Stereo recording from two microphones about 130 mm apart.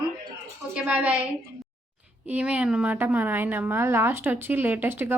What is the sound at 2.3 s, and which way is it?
A woman's voice, 10° right (ahead or behind).